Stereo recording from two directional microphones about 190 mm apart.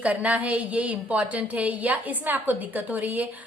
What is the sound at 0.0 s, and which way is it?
Speech, 5° right (ahead or behind).